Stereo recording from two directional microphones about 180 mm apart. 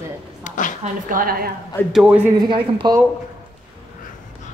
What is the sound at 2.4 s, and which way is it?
Speech, 25° right (ahead or behind).